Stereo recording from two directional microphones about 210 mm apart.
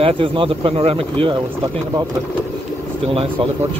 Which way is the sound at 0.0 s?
25° right (ahead or behind).